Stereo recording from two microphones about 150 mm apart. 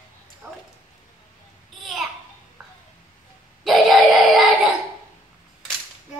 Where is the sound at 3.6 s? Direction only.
Centre (ahead or behind).